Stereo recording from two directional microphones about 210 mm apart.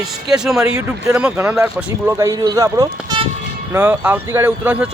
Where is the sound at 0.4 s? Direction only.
5° right (ahead or behind).